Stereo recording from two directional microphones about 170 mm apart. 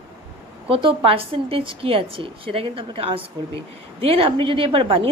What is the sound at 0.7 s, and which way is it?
A woman's voice, 35° right (ahead or behind).